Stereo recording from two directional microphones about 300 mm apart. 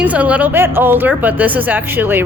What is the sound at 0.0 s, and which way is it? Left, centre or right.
A woman's voice, centre.